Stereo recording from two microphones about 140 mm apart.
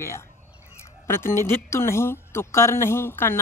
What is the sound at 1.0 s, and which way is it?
A woman's voice, 15° left (ahead or behind).